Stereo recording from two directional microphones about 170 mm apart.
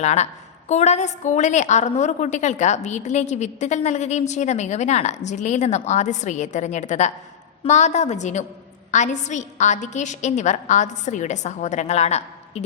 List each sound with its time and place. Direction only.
0.0 s a woman's voice: 40° left (ahead or behind)